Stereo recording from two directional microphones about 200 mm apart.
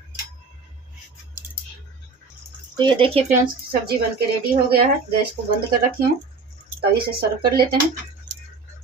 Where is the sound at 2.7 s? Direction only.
25° right (ahead or behind).